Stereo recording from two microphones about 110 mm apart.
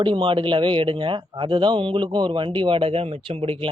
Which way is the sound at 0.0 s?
50° right (ahead or behind).